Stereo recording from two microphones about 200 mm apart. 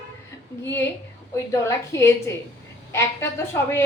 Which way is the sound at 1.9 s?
15° left (ahead or behind).